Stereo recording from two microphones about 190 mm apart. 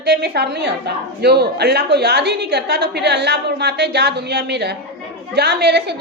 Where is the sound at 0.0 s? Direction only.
60° right (ahead or behind).